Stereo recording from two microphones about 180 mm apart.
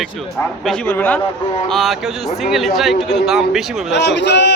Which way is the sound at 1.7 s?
Centre (ahead or behind).